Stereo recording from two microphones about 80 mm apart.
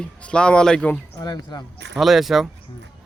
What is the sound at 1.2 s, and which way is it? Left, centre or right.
Speech, left.